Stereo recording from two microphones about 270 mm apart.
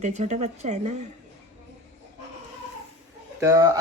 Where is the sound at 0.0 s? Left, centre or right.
Right.